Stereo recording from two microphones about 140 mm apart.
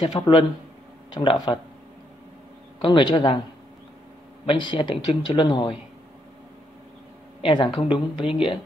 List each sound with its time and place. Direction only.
0.0 s speech: 35° left (ahead or behind)
2.8 s speech: 35° left (ahead or behind)
4.5 s speech: 35° left (ahead or behind)
7.4 s speech: 35° left (ahead or behind)